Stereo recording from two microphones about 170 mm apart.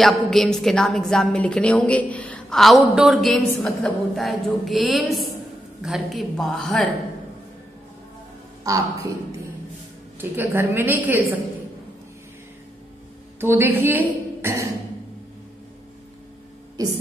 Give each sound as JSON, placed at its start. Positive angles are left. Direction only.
{"t": 0.0, "sound": "a woman's voice", "side_deg": 0}
{"t": 8.6, "sound": "a woman's voice", "side_deg": -20}
{"t": 10.3, "sound": "a woman's voice", "side_deg": -10}
{"t": 13.4, "sound": "speech", "side_deg": -15}
{"t": 16.8, "sound": "a woman's voice", "side_deg": -20}